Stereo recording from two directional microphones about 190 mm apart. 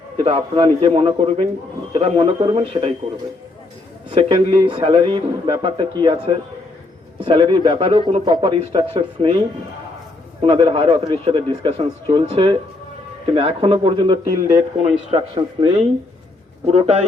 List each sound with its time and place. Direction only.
0.2 s speech: 30° right (ahead or behind)
4.1 s speech: 30° right (ahead or behind)
7.3 s speech: 25° right (ahead or behind)
10.4 s speech: 30° right (ahead or behind)